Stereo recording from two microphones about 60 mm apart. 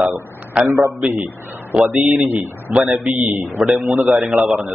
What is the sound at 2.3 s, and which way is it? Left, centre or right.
Speech, right.